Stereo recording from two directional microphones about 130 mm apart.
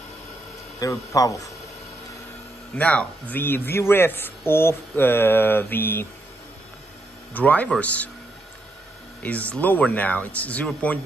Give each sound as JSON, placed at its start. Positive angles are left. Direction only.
{"t": 0.7, "sound": "a man's voice", "side_deg": 25}
{"t": 2.7, "sound": "a man's voice", "side_deg": 10}
{"t": 7.3, "sound": "a man's voice", "side_deg": 10}
{"t": 9.2, "sound": "a man's voice", "side_deg": 10}